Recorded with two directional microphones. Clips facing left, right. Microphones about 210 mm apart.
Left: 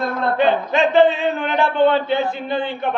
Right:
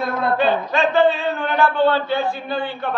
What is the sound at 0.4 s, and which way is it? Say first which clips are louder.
A man's voice: left 4 dB; 20° left (ahead or behind).